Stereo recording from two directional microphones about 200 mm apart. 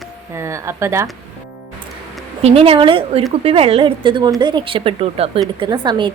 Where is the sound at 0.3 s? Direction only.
15° right (ahead or behind).